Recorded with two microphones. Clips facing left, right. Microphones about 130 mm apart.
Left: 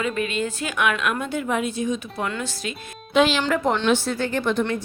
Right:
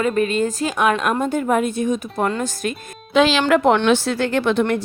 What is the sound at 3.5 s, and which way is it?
Speech, 70° right (ahead or behind).